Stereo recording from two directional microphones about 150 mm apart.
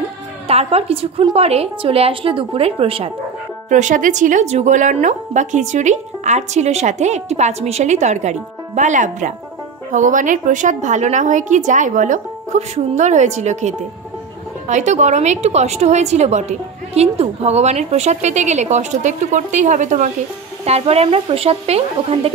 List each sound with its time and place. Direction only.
0.5 s a woman's voice: 40° right (ahead or behind)
3.6 s a woman's voice: 55° right (ahead or behind)
20.6 s speech: 45° right (ahead or behind)